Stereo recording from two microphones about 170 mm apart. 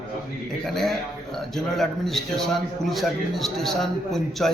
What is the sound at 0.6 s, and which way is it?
A man's voice, centre (ahead or behind).